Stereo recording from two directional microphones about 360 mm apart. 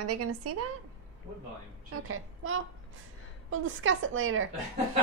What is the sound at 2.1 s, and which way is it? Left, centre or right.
A child's voice, right.